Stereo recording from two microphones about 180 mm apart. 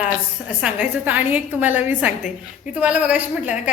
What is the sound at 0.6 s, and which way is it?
A woman's voice, 10° right (ahead or behind).